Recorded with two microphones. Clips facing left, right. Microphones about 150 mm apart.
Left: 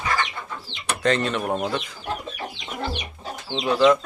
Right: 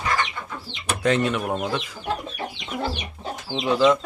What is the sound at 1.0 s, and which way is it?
Speech, 10° right (ahead or behind).